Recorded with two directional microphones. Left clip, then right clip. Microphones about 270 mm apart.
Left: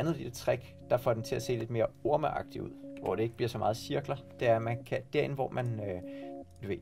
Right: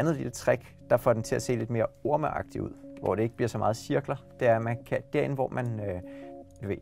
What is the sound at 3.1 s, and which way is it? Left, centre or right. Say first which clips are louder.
Speech: right 4 dB; right.